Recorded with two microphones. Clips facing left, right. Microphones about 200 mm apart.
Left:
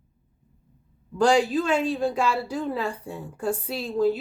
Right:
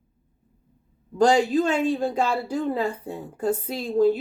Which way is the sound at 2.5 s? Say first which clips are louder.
Right 3 dB; 45° right (ahead or behind).